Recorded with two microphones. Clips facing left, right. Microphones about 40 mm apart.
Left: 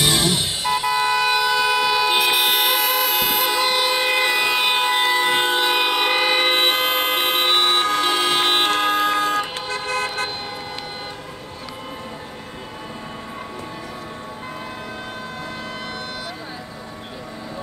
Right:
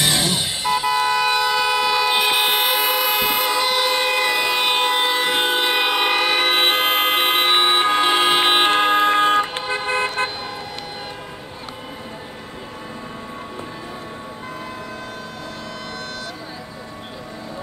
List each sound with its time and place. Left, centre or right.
0.0 s vehicle: centre
2.1 s toot: centre
2.7 s vehicle: right
3.4 s train: centre
6.1 s vehicle: centre
6.5 s vehicle: centre
9.4 s car: right